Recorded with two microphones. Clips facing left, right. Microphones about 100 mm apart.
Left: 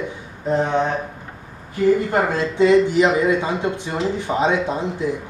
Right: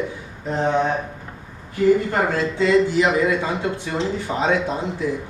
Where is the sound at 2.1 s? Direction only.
20° left (ahead or behind).